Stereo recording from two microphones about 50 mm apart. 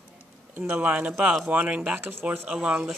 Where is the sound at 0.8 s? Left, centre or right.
Right.